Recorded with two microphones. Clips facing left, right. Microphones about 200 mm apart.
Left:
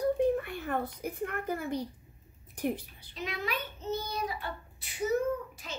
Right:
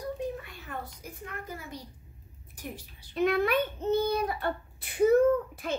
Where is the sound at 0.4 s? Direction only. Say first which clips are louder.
Left 7 dB; 60° left (ahead or behind).